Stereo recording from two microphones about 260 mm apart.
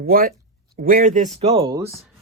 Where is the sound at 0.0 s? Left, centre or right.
Right; by 2.0 s centre.